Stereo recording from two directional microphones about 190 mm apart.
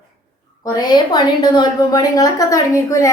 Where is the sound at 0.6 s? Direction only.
20° left (ahead or behind).